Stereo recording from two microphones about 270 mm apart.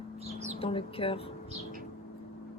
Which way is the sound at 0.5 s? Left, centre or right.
Left.